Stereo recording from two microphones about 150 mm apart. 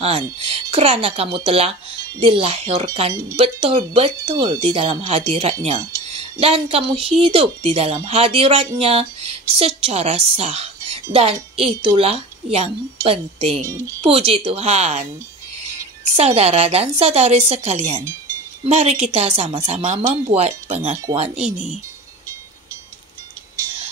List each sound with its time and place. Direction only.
0.0 s a woman's voice: 40° right (ahead or behind)
16.2 s a woman's voice: 45° right (ahead or behind)